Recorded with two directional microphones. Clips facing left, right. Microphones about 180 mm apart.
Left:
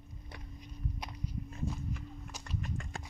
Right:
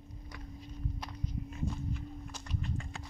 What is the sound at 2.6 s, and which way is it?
Horse, 45° left (ahead or behind).